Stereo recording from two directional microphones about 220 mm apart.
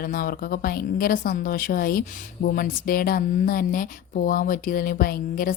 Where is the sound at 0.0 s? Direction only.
40° left (ahead or behind).